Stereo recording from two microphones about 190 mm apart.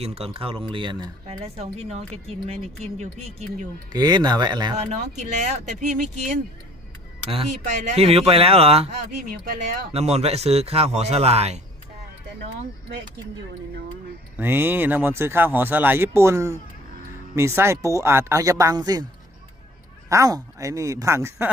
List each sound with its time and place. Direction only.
0.0 s speech: 30° right (ahead or behind)
3.9 s speech: 20° right (ahead or behind)
4.9 s speech: 40° right (ahead or behind)
9.9 s speech: 35° right (ahead or behind)
14.3 s speech: 10° right (ahead or behind)
20.1 s speech: 15° right (ahead or behind)